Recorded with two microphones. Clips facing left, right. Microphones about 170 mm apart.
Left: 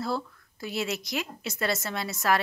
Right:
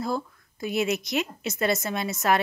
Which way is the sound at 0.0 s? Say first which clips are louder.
Right 2 dB; 15° right (ahead or behind).